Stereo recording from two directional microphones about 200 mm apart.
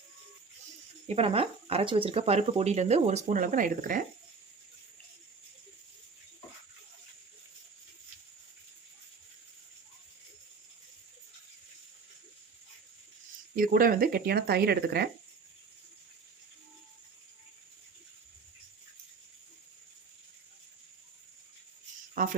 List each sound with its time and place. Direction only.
1.0 s speech: 30° right (ahead or behind)
13.6 s speech: 45° right (ahead or behind)
22.1 s a sound: 45° right (ahead or behind)